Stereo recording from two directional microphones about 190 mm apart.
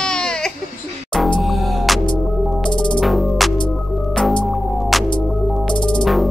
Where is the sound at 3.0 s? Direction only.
Centre (ahead or behind).